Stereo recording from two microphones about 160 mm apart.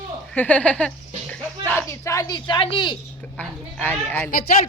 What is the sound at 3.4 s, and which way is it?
Speech, 10° left (ahead or behind).